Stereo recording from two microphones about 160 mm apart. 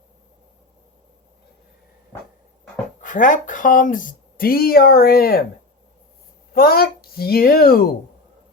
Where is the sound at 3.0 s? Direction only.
55° left (ahead or behind); by 5.5 s 70° left (ahead or behind).